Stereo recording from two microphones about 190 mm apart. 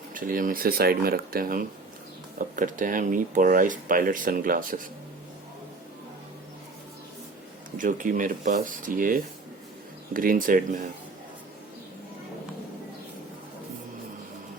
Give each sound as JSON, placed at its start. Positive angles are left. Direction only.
{"t": 0.1, "sound": "speech", "side_deg": -45}
{"t": 7.8, "sound": "speech", "side_deg": -45}